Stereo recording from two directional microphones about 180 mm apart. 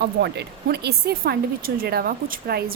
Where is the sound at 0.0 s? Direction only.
65° right (ahead or behind).